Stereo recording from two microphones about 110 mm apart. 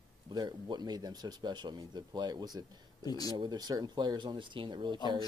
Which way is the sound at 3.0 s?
35° left (ahead or behind).